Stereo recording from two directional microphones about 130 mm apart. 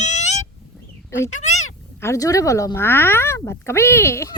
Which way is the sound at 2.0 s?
25° left (ahead or behind).